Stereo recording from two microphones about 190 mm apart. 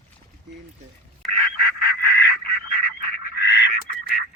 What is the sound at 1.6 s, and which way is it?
Duck, 50° left (ahead or behind).